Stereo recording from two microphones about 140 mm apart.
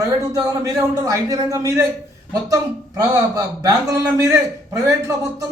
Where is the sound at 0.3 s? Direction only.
25° right (ahead or behind).